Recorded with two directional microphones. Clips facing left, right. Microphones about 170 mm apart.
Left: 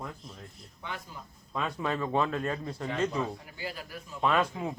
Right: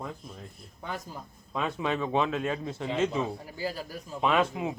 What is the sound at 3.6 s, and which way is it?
Speech, 35° right (ahead or behind).